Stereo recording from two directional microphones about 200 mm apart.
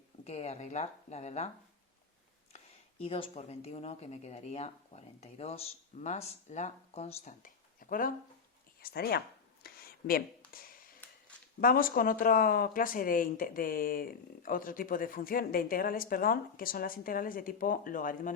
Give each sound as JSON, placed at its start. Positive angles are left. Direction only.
{"t": 0.3, "sound": "speech", "side_deg": 30}
{"t": 3.0, "sound": "speech", "side_deg": 30}
{"t": 9.6, "sound": "a sound", "side_deg": 50}
{"t": 11.6, "sound": "speech", "side_deg": 45}